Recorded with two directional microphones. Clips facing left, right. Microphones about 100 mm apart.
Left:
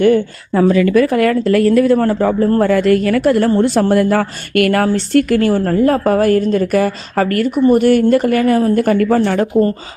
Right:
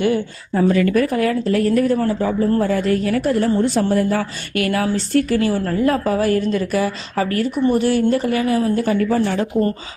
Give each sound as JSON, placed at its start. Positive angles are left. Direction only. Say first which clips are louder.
{"t": 0.5, "sound": "speech", "louder": "left 5 dB", "side_deg": 90}
{"t": 2.6, "sound": "speech", "louder": "left 6 dB", "side_deg": 75}